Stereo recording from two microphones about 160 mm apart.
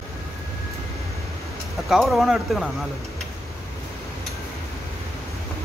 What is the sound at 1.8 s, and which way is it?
Speech, centre (ahead or behind).